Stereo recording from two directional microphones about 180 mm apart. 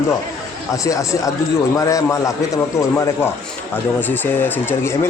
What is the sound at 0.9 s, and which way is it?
A man's voice, 20° left (ahead or behind).